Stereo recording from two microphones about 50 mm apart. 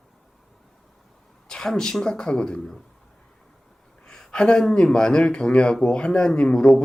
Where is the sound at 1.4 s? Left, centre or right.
Centre.